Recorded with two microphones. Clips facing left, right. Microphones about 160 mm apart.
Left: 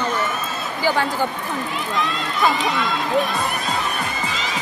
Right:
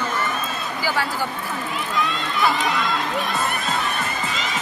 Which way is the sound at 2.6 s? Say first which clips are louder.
Left 1 dB; centre (ahead or behind).